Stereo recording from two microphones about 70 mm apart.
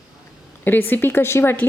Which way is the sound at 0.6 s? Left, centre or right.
Left.